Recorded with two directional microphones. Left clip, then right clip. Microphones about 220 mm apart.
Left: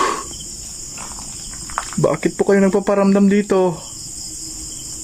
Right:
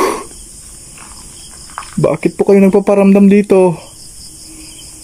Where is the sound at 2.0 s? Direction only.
10° right (ahead or behind).